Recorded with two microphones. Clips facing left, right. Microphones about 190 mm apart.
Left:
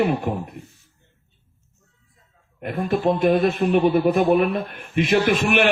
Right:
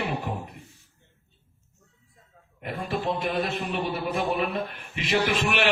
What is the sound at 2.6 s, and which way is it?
A man's voice, 55° left (ahead or behind).